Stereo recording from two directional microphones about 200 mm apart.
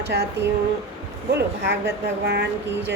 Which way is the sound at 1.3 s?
60° right (ahead or behind).